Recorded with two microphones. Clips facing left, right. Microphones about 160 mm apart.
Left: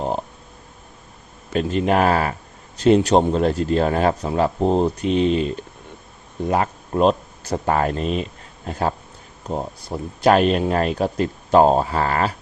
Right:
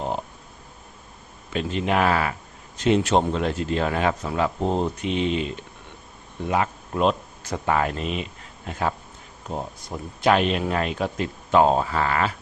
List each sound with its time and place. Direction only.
1.5 s speech: 45° left (ahead or behind)